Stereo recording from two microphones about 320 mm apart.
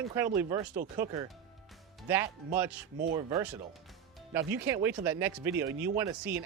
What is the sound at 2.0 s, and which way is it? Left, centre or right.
Music, centre.